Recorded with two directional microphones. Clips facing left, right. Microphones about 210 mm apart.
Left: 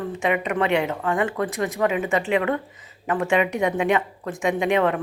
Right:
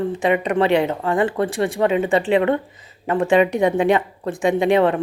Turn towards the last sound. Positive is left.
turn(degrees=-30)  # may be behind; listen again after turning